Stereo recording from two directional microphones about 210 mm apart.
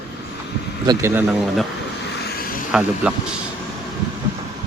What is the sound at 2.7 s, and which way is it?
Speech, 5° right (ahead or behind).